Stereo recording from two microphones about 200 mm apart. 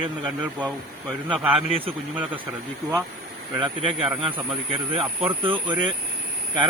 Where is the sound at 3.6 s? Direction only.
30° right (ahead or behind).